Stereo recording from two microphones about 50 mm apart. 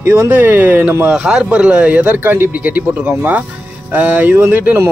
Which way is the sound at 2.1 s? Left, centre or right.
Right.